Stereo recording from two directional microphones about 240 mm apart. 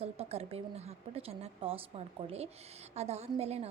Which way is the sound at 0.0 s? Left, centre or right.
Right.